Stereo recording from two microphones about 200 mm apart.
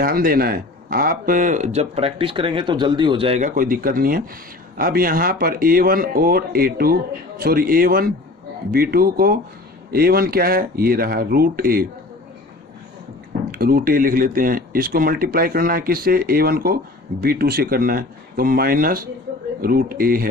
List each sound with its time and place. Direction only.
0.0 s speech: 45° right (ahead or behind)
13.5 s speech: 50° right (ahead or behind)